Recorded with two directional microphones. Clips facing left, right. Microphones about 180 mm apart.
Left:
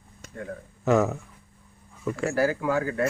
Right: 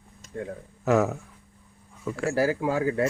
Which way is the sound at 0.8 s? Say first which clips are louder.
Even; centre (ahead or behind).